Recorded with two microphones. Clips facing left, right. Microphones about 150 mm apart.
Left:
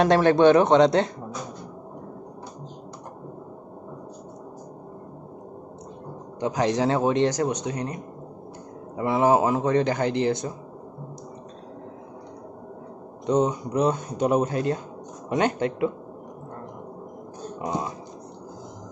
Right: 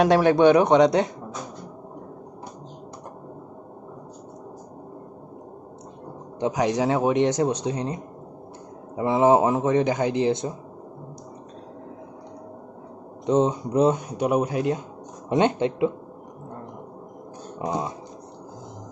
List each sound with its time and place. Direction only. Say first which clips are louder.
0.0 s a man's voice: even; 10° right (ahead or behind)
6.4 s a man's voice: even; 15° right (ahead or behind)
7.2 s a man's voice: right 2 dB; 25° right (ahead or behind)
13.2 s a man's voice: right 1 dB; 25° right (ahead or behind)
13.9 s a man's voice: even; 10° right (ahead or behind)
15.2 s a man's voice: right 3 dB; 25° right (ahead or behind)
17.6 s speech: right 2 dB; 20° right (ahead or behind)